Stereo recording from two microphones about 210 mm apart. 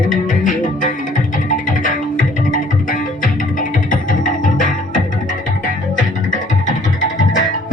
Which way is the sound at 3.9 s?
40° left (ahead or behind).